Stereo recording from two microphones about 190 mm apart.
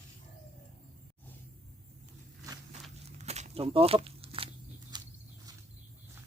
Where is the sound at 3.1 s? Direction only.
35° right (ahead or behind).